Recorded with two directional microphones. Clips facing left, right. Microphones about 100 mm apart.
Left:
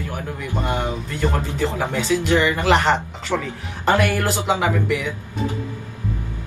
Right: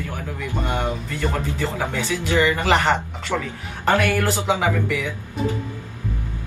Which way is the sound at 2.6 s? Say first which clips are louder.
Left 2 dB; centre (ahead or behind).